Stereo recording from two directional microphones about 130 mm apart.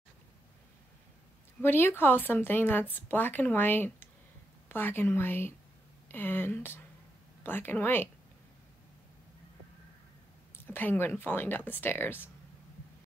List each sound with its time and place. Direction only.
1.6 s speech: 15° left (ahead or behind)
10.7 s speech: 15° left (ahead or behind)